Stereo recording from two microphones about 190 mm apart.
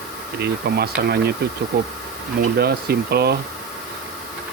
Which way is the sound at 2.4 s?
55° right (ahead or behind).